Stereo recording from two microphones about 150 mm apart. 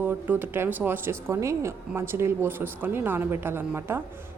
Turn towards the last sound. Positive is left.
turn(degrees=-15)  # may be behind; listen again after turning